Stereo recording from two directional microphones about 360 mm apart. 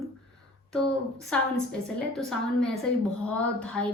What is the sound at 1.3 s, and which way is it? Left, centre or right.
A woman's voice, centre.